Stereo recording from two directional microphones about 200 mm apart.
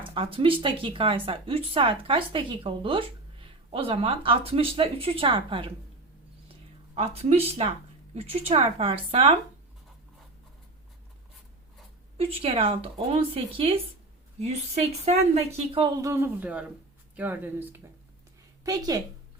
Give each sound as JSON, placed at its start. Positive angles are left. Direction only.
{"t": 0.0, "sound": "speech", "side_deg": -25}
{"t": 6.9, "sound": "speech", "side_deg": -30}
{"t": 12.1, "sound": "speech", "side_deg": -30}